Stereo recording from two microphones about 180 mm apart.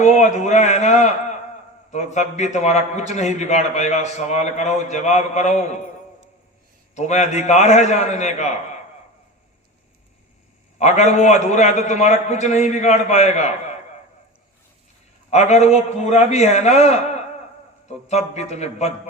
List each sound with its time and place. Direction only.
0.0 s a man's voice: 40° left (ahead or behind)
6.9 s a man's voice: 40° left (ahead or behind)
10.8 s a man's voice: 40° left (ahead or behind)
15.3 s a man's voice: 40° left (ahead or behind)